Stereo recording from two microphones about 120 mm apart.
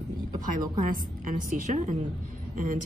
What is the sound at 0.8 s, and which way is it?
Speech, 90° right.